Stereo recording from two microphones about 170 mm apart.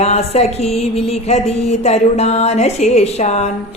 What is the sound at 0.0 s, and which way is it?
A woman's voice, 40° left (ahead or behind).